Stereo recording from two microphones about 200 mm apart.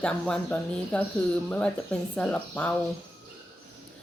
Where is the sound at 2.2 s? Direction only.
5° left (ahead or behind).